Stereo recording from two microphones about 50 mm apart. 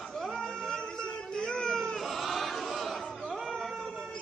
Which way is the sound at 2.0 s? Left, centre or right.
Centre.